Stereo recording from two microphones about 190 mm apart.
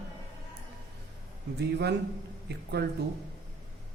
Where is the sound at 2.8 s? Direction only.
60° right (ahead or behind).